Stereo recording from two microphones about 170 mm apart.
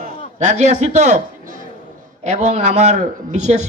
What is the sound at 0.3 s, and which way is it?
A man's voice, 45° right (ahead or behind).